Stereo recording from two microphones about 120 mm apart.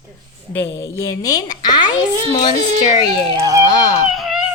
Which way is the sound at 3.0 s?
35° left (ahead or behind).